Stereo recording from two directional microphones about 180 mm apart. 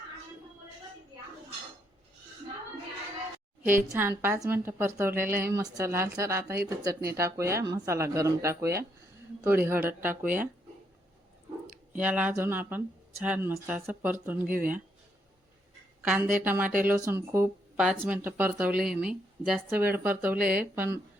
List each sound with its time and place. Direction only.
3.6 s speech: 15° right (ahead or behind)
11.9 s speech: 10° right (ahead or behind)
14.4 s speech: 50° right (ahead or behind)
16.0 s speech: 10° right (ahead or behind)
17.7 s speech: centre (ahead or behind)